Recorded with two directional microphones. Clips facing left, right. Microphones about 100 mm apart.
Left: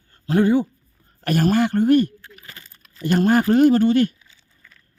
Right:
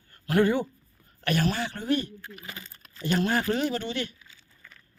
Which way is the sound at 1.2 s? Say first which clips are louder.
Left 9 dB; 45° left (ahead or behind).